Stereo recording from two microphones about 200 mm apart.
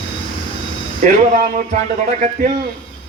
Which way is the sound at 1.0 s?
40° right (ahead or behind).